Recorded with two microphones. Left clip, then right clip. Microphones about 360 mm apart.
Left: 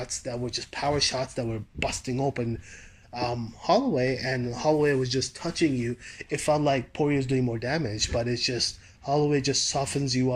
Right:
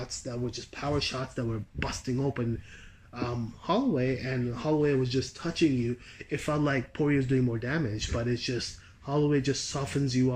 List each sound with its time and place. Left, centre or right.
0.0 s speech: centre